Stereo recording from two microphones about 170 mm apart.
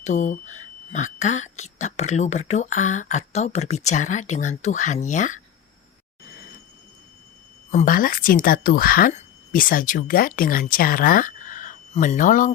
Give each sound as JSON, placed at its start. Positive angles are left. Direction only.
{"t": 0.0, "sound": "speech", "side_deg": 45}
{"t": 7.7, "sound": "a woman's voice", "side_deg": 50}